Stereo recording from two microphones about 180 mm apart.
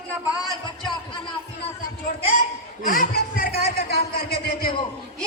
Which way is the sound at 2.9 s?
50° left (ahead or behind).